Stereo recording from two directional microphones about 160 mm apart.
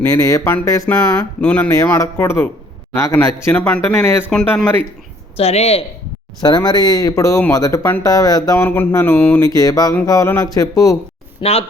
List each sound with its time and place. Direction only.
0.0 s speech: 20° left (ahead or behind)
1.4 s a man's voice: 10° left (ahead or behind)
5.4 s speech: 40° left (ahead or behind)
6.4 s speech: 25° left (ahead or behind); by 9.4 s 10° left (ahead or behind)
9.4 s speech: 20° left (ahead or behind)
11.3 s speech: 40° left (ahead or behind)